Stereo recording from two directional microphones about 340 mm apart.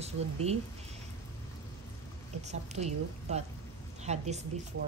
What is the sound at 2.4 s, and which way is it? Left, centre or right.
A woman's voice, centre.